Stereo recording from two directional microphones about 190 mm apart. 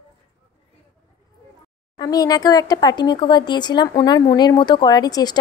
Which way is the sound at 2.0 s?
20° left (ahead or behind).